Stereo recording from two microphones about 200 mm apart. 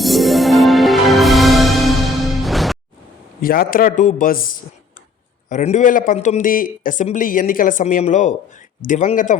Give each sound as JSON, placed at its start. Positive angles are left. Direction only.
{"t": 0.0, "sound": "music", "side_deg": 0}
{"t": 3.4, "sound": "a man's voice", "side_deg": 45}